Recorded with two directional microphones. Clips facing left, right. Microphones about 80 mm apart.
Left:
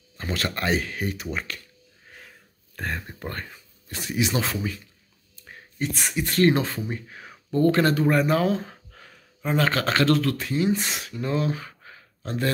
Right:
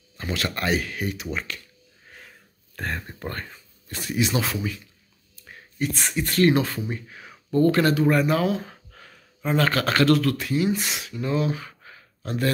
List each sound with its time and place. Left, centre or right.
0.2 s a sound: left
0.6 s speech: left
2.7 s speech: centre
3.9 s speech: centre
4.4 s speech: left
6.3 s speech: left
7.1 s speech: left
8.9 s speech: centre; by 11.7 s left
11.8 s a sound: left